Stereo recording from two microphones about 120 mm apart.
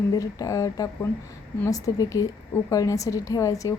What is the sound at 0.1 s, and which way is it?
A woman's voice, 30° left (ahead or behind).